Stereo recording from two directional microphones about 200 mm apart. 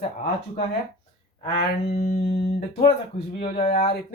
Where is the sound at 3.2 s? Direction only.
50° left (ahead or behind); by 3.9 s 35° left (ahead or behind).